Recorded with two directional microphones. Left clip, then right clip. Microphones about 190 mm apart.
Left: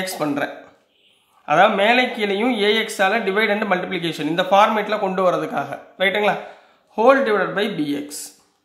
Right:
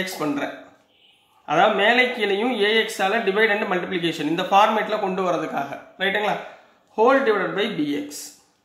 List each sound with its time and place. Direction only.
0.0 s speech: 40° left (ahead or behind)